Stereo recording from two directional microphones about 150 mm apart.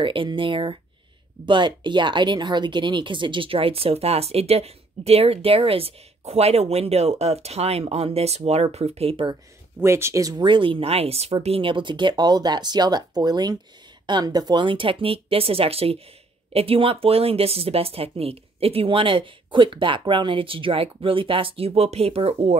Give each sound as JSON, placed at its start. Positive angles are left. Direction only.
{"t": 0.0, "sound": "speech", "side_deg": -35}
{"t": 9.8, "sound": "speech", "side_deg": -15}